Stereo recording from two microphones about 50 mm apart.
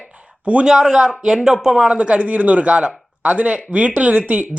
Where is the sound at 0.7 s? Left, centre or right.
Centre.